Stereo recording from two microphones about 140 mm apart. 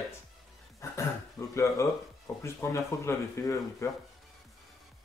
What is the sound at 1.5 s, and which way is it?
Speech, 20° left (ahead or behind).